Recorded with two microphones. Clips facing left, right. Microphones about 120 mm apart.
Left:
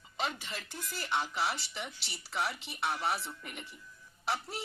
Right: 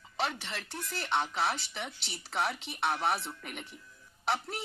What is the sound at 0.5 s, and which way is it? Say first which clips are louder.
Speech: right 3 dB; 65° right (ahead or behind).